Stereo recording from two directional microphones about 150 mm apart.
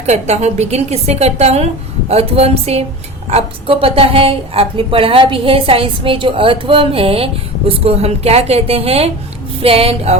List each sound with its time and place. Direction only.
0.0 s a woman's voice: 45° right (ahead or behind)